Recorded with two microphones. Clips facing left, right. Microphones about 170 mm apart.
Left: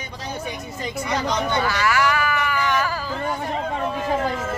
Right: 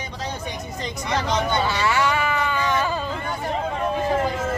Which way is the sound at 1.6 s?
25° right (ahead or behind).